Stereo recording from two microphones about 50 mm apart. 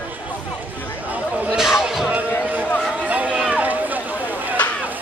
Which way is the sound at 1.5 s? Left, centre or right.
Centre.